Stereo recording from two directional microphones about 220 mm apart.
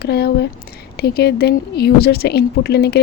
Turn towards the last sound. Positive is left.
turn(degrees=45)  # may be behind; listen again after turning